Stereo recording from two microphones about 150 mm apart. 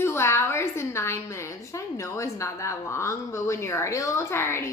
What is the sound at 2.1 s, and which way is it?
Speech, 20° left (ahead or behind).